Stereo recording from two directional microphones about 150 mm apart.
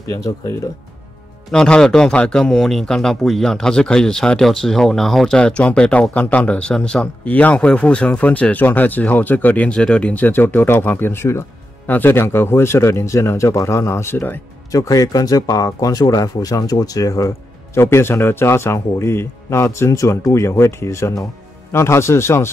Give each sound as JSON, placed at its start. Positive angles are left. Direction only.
{"t": 0.1, "sound": "speech", "side_deg": 20}
{"t": 1.5, "sound": "speech", "side_deg": 5}